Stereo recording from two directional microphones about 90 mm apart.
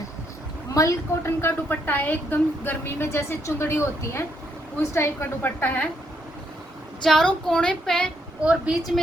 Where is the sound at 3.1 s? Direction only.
30° left (ahead or behind).